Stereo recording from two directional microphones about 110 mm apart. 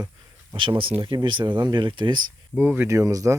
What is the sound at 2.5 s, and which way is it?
Speech, 15° right (ahead or behind).